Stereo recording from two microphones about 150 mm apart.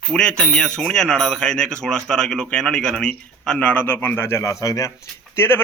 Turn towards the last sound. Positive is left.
turn(degrees=15)  # may be behind; listen again after turning